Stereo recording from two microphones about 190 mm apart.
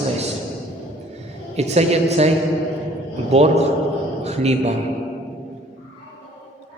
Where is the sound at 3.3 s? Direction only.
35° right (ahead or behind).